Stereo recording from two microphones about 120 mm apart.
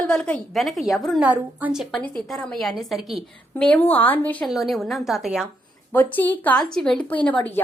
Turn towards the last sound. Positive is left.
turn(degrees=15)  # may be behind; listen again after turning